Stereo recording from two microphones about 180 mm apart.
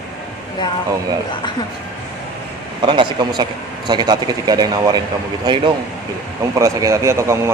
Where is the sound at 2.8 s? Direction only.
25° right (ahead or behind).